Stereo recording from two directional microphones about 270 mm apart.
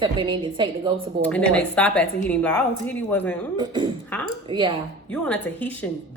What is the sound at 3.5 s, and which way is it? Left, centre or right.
A woman's voice, centre.